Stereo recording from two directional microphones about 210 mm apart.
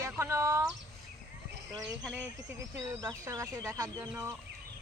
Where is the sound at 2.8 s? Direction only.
15° right (ahead or behind).